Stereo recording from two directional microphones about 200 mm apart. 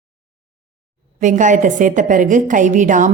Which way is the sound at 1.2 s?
40° right (ahead or behind).